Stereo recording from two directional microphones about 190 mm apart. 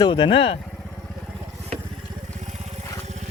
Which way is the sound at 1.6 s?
30° right (ahead or behind).